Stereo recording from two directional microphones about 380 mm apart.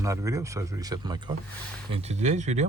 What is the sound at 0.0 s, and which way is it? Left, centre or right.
Speech, centre.